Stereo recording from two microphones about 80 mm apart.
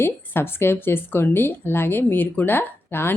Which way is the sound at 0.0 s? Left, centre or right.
Left.